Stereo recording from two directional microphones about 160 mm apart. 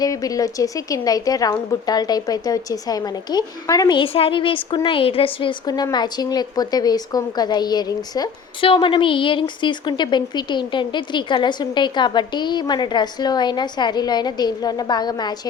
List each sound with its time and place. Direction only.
0.0 s a woman's voice: 20° left (ahead or behind)